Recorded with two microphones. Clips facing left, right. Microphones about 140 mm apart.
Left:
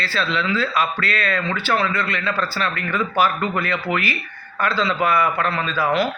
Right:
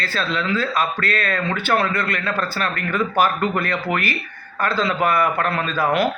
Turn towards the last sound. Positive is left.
turn(degrees=-50)  # may be behind; listen again after turning